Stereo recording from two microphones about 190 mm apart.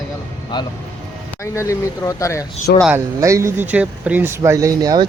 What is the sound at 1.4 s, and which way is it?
Speech, 15° left (ahead or behind).